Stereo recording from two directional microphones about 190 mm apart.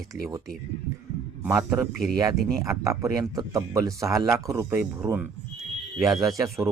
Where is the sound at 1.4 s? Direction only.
15° right (ahead or behind).